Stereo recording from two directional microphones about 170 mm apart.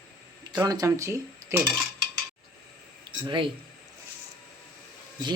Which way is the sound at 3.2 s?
30° right (ahead or behind).